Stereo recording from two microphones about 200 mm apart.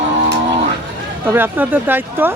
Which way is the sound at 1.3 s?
10° right (ahead or behind).